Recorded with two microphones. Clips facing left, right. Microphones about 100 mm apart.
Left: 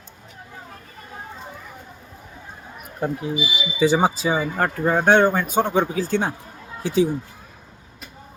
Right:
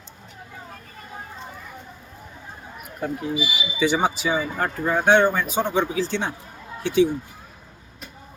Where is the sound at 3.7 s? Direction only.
35° left (ahead or behind).